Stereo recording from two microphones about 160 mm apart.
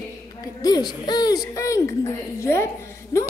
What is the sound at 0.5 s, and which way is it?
Speech, 25° left (ahead or behind).